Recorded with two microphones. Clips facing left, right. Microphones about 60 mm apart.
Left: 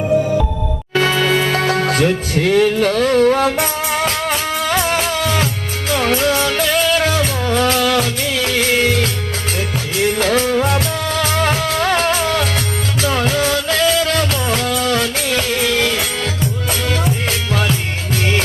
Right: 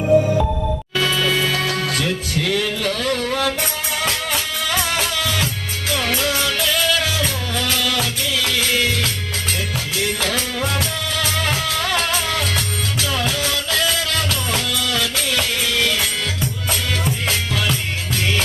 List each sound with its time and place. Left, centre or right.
0.9 s music: left
10.2 s music: left